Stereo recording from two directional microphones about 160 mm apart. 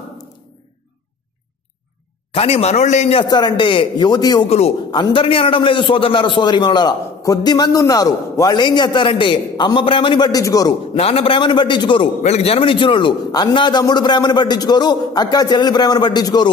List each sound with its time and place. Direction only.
2.3 s a man's voice: 40° left (ahead or behind)
3.3 s a man's voice: 25° left (ahead or behind)
4.5 s a man's voice: 40° left (ahead or behind); by 10.7 s 25° left (ahead or behind)
11.0 s a man's voice: 40° left (ahead or behind)
12.2 s a man's voice: 40° left (ahead or behind); by 16.4 s 25° left (ahead or behind)